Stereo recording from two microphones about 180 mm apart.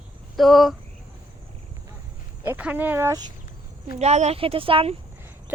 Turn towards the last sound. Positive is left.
turn(degrees=-30)  # may be behind; listen again after turning